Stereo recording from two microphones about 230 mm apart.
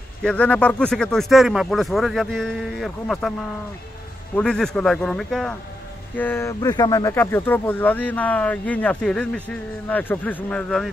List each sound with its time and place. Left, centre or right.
0.2 s speech: centre
4.4 s speech: centre